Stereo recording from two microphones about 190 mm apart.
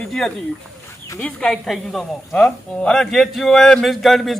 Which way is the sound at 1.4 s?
Centre (ahead or behind).